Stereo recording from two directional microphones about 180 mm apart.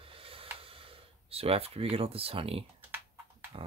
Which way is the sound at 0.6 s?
30° right (ahead or behind).